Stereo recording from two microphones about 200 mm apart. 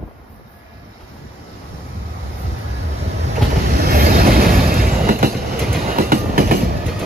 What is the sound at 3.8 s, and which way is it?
Train, 45° right (ahead or behind).